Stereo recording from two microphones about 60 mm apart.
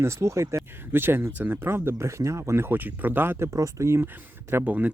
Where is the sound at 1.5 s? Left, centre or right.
Right.